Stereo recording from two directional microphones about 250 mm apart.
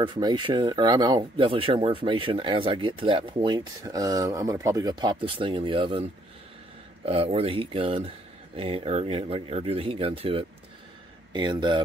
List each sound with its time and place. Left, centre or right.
0.0 s speech: centre
7.1 s speech: right